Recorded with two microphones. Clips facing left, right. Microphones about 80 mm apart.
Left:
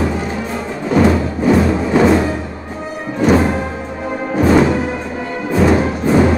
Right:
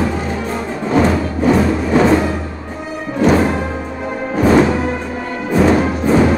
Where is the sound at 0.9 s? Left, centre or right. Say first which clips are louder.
Left 1 dB; centre.